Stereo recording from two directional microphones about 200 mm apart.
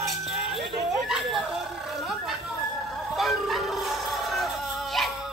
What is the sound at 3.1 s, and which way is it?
Music, centre (ahead or behind).